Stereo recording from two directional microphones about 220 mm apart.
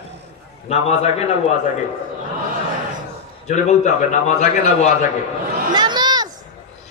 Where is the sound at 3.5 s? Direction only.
30° left (ahead or behind).